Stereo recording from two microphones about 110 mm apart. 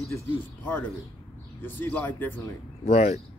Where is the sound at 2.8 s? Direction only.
70° left (ahead or behind).